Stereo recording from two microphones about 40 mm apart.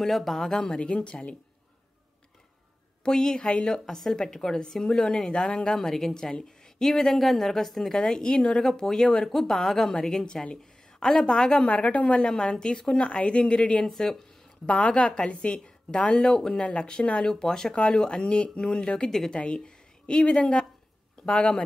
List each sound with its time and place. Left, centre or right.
0.0 s speech: centre
0.7 s a woman's voice: left
3.0 s a woman's voice: centre
3.8 s speech: centre
5.0 s a woman's voice: left
8.0 s speech: centre
9.9 s a woman's voice: centre
11.6 s a woman's voice: left
12.3 s a woman's voice: centre
13.8 s speech: centre
14.7 s a woman's voice: left
17.2 s a woman's voice: centre
19.0 s speech: centre
19.3 s a woman's voice: left